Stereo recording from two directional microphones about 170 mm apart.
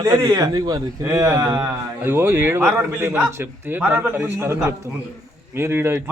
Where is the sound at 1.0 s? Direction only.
10° right (ahead or behind).